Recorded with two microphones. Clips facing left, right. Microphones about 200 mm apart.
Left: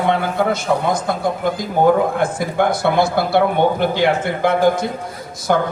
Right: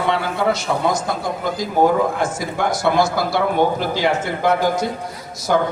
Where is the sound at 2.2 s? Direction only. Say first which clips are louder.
Left 4 dB; 55° left (ahead or behind).